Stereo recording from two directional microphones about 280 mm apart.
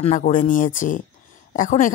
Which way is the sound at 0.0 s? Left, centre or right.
Left.